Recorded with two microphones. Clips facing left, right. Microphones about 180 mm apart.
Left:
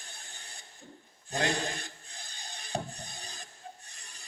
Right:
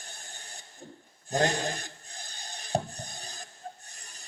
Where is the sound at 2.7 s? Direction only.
40° right (ahead or behind).